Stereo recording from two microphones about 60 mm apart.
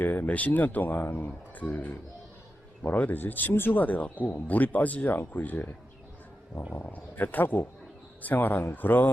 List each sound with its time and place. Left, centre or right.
0.0 s speech: left
6.7 s speech: left